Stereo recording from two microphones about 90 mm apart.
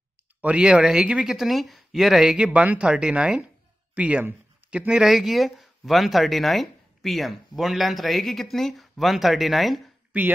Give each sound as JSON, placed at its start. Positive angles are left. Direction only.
{"t": 0.4, "sound": "speech", "side_deg": -15}
{"t": 10.1, "sound": "speech", "side_deg": -15}